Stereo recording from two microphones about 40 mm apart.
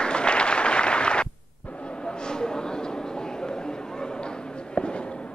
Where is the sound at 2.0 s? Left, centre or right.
Left.